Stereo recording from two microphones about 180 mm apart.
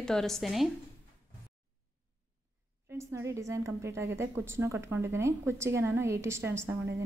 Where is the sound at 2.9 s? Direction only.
15° right (ahead or behind).